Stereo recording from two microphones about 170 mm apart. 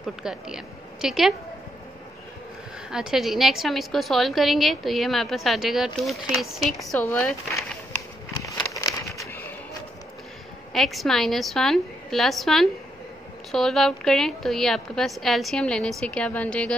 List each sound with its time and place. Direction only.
0.0 s a woman's voice: 5° right (ahead or behind)
2.9 s a woman's voice: 5° right (ahead or behind)
8.7 s a sound: 20° left (ahead or behind)
10.7 s a woman's voice: centre (ahead or behind)